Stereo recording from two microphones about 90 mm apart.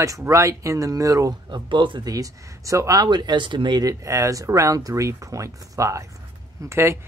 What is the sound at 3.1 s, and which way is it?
Speech, 55° right (ahead or behind).